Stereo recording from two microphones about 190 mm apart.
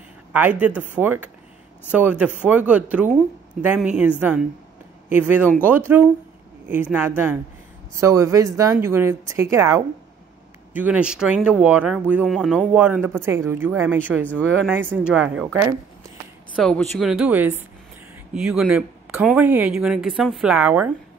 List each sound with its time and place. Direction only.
0.3 s speech: 10° right (ahead or behind)